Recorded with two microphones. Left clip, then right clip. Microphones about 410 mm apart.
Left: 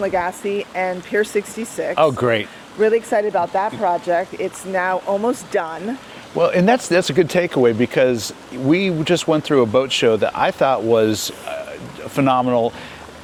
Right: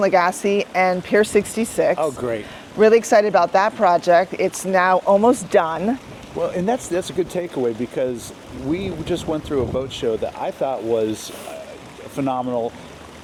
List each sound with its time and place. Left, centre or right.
0.0 s speech: right
2.0 s speech: left
2.8 s speech: right
6.4 s speech: left
12.1 s speech: left